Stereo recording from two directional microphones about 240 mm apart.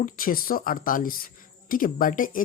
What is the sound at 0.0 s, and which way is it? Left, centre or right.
A woman's voice, left.